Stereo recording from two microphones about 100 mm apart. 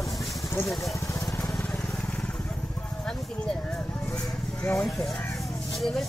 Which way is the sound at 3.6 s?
10° left (ahead or behind).